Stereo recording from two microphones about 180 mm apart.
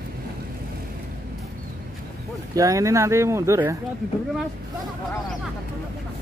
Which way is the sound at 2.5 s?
20° right (ahead or behind).